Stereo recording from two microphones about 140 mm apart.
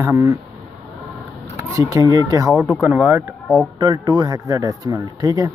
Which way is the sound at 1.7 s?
25° right (ahead or behind).